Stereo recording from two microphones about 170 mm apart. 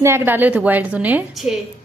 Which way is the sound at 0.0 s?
15° right (ahead or behind).